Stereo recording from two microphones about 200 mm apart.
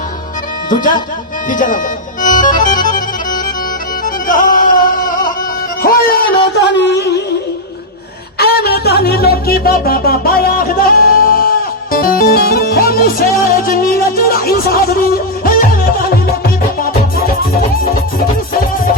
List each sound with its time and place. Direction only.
0.7 s speech: 40° left (ahead or behind)
2.2 s accordion: 40° left (ahead or behind)
2.6 s music: 40° left (ahead or behind)
4.0 s music: 40° left (ahead or behind)
5.8 s speech: 50° left (ahead or behind)
8.4 s music: 50° left (ahead or behind)